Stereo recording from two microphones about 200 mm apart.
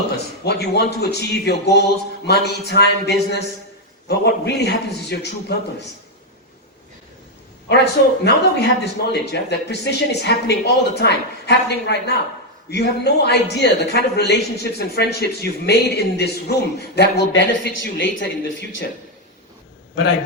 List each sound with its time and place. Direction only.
0.4 s a man's voice: 55° left (ahead or behind)
7.7 s a man's voice: 55° left (ahead or behind)